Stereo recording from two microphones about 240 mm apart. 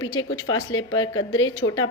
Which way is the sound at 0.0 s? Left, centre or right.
Left.